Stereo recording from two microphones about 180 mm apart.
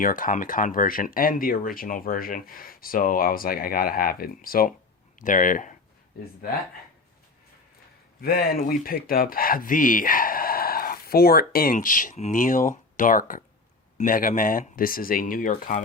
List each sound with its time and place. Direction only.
0.0 s speech: 50° left (ahead or behind)
8.2 s speech: 55° left (ahead or behind)